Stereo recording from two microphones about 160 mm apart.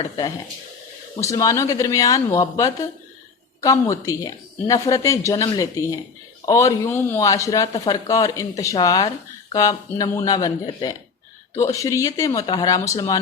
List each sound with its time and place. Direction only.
1.1 s speech: 20° left (ahead or behind)